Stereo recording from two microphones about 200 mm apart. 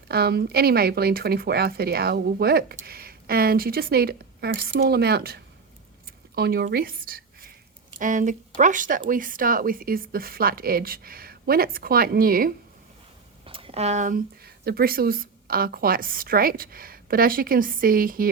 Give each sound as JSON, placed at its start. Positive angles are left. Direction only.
{"t": 0.1, "sound": "speech", "side_deg": -55}
{"t": 13.4, "sound": "speech", "side_deg": -25}